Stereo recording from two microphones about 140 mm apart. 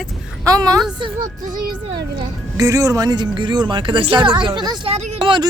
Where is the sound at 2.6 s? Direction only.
25° right (ahead or behind).